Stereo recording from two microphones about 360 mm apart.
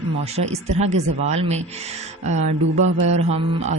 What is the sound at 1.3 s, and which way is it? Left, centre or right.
Speech, centre.